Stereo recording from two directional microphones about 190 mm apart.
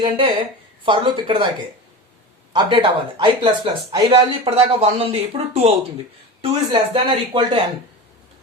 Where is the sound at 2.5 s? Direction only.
25° right (ahead or behind).